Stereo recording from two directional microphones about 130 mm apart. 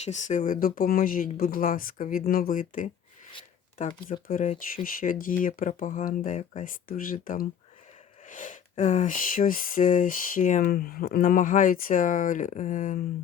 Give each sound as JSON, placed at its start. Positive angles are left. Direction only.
{"t": 0.0, "sound": "speech", "side_deg": 65}
{"t": 4.1, "sound": "speech", "side_deg": 60}
{"t": 4.5, "sound": "speech", "side_deg": 90}